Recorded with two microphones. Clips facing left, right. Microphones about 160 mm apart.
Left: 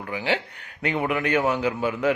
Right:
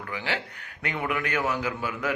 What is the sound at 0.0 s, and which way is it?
A man's voice, 25° left (ahead or behind).